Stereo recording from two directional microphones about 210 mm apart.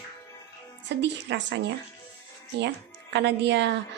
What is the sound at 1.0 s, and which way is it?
A woman's voice, 55° right (ahead or behind).